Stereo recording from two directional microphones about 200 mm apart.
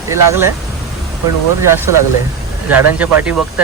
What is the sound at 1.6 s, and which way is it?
Speech, 15° right (ahead or behind).